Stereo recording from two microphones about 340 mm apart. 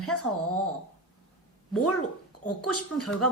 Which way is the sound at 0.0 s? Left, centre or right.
Left.